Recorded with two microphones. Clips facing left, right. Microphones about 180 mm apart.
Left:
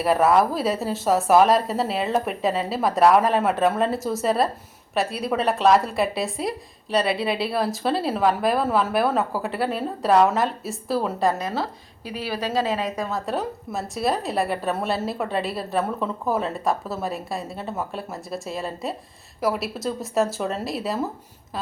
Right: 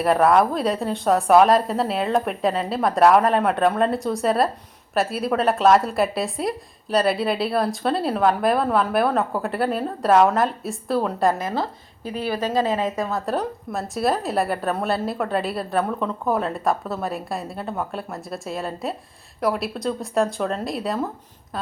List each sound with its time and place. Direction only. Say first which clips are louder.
0.0 s a woman's voice: right 1 dB; centre (ahead or behind)
11.3 s speech: right 1 dB; 20° right (ahead or behind)
13.1 s a woman's voice: right 2 dB; centre (ahead or behind)